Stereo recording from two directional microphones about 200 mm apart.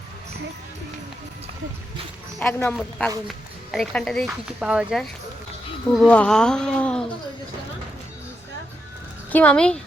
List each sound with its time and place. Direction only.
2.4 s speech: 10° left (ahead or behind)
9.3 s speech: 5° left (ahead or behind)